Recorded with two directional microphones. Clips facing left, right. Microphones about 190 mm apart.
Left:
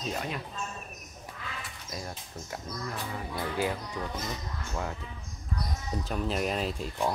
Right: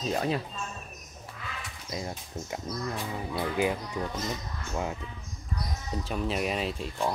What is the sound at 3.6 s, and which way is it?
Speech, 15° right (ahead or behind).